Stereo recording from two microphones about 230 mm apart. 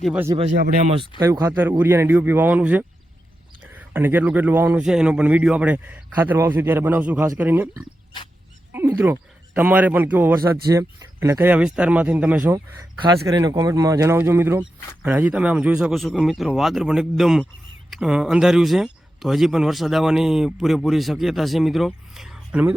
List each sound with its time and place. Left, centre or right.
0.0 s a man's voice: centre
0.3 s speech: right
1.2 s a man's voice: centre
8.7 s a sound: centre
9.6 s a man's voice: centre
12.5 s a man's voice: centre